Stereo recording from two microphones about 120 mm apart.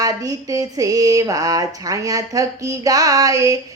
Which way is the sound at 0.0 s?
30° right (ahead or behind).